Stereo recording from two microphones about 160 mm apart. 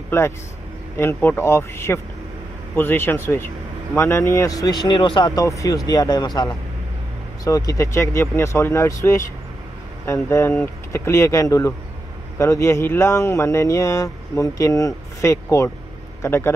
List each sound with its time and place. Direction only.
0.9 s speech: 15° left (ahead or behind)